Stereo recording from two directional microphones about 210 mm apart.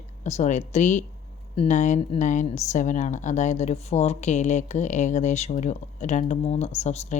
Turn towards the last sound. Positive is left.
turn(degrees=30)  # may be behind; listen again after turning